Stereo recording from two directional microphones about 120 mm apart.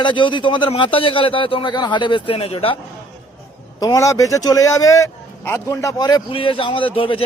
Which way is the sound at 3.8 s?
30° left (ahead or behind).